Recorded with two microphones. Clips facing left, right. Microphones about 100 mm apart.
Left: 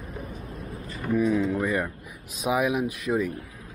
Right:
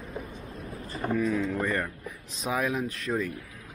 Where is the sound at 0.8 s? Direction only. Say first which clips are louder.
Right 1 dB; 35° right (ahead or behind).